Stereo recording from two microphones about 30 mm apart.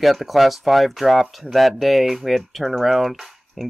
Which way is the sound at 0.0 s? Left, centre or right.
Centre.